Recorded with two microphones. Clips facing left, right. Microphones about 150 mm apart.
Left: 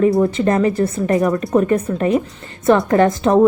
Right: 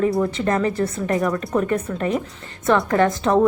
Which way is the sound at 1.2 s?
20° left (ahead or behind).